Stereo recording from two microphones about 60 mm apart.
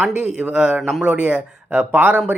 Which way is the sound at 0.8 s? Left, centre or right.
Centre.